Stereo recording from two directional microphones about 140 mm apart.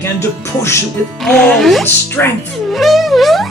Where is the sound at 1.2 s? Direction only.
5° left (ahead or behind).